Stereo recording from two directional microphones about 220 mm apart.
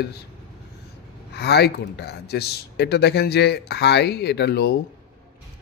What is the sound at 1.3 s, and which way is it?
A man's voice, 50° left (ahead or behind).